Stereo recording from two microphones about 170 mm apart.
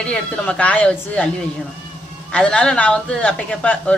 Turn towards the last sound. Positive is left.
turn(degrees=5)  # may be behind; listen again after turning